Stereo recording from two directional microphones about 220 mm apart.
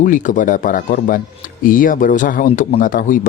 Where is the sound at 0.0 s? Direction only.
35° left (ahead or behind).